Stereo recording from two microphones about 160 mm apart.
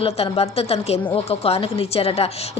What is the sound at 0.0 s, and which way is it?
A woman's voice, 40° left (ahead or behind).